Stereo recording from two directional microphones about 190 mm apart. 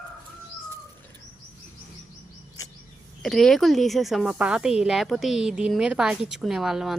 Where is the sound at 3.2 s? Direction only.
Centre (ahead or behind).